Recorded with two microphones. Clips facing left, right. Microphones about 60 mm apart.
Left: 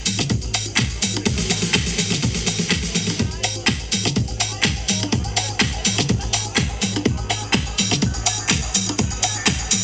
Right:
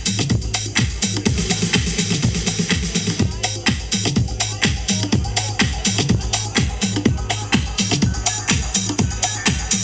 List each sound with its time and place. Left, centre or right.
0.2 s music: centre
6.5 s music: centre
8.0 s music: centre